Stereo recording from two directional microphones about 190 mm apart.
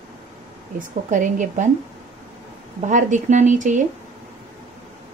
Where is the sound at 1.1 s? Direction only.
40° right (ahead or behind).